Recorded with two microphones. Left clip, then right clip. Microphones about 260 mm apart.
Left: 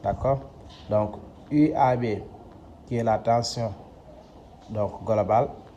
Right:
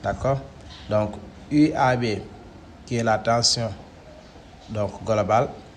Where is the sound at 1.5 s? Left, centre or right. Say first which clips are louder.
Right 1 dB; centre.